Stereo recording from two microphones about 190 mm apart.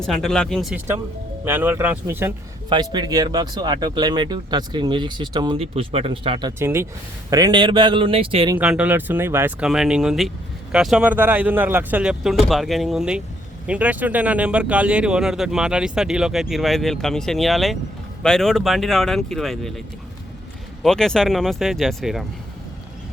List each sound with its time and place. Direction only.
0.0 s speech: 5° left (ahead or behind)
1.5 s speech: 10° right (ahead or behind)
2.6 s speech: 25° right (ahead or behind)
6.6 s speech: 10° right (ahead or behind); by 8.5 s 30° right (ahead or behind)
8.5 s speech: 5° right (ahead or behind)
20.8 s speech: 5° left (ahead or behind)